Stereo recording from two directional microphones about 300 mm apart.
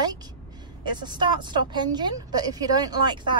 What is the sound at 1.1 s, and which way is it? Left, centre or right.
Speech, centre.